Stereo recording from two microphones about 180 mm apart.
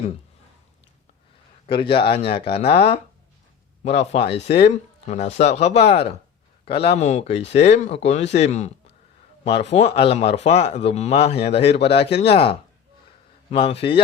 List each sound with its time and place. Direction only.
1.6 s speech: 30° left (ahead or behind)